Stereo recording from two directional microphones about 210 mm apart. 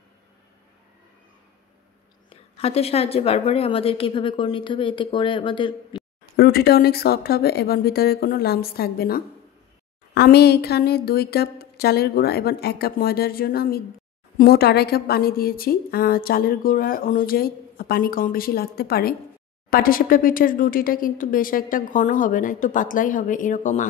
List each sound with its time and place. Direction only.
2.2 s a woman's voice: 30° left (ahead or behind)
6.3 s a woman's voice: 45° left (ahead or behind)